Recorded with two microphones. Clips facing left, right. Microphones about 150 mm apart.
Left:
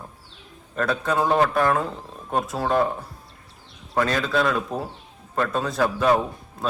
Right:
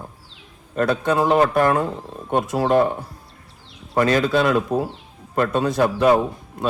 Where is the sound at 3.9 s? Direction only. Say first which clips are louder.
Right 5 dB; 20° right (ahead or behind).